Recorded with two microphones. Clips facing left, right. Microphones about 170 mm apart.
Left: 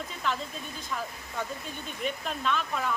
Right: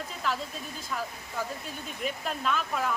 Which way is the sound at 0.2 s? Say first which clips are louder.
Even; 5° right (ahead or behind).